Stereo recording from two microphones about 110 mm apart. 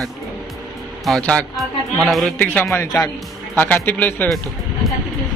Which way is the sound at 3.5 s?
15° left (ahead or behind).